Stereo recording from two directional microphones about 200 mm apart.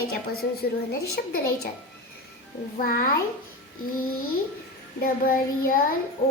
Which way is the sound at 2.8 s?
45° left (ahead or behind).